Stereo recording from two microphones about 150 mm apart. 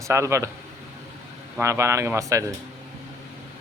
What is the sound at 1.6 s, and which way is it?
Speech, 20° right (ahead or behind).